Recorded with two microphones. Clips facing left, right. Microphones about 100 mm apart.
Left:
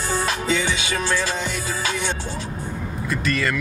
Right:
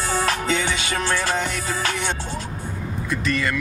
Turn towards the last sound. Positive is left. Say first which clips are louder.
# even
turn(degrees=0)  # may be behind; listen again after turning